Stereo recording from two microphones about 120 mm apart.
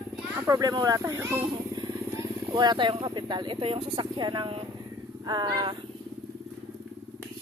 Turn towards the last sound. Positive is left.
turn(degrees=-35)  # may be behind; listen again after turning